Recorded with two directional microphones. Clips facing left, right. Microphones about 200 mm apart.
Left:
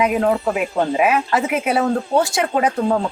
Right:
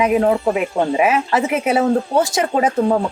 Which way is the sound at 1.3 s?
25° right (ahead or behind).